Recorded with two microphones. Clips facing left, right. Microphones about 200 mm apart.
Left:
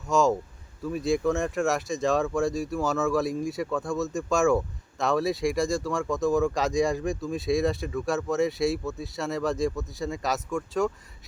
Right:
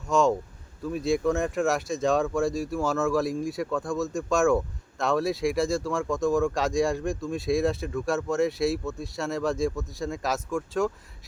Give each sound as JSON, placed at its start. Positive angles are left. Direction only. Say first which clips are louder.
{"t": 0.1, "sound": "speech", "louder": "even", "side_deg": 0}